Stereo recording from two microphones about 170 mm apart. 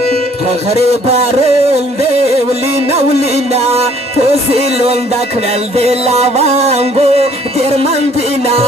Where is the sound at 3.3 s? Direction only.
40° right (ahead or behind).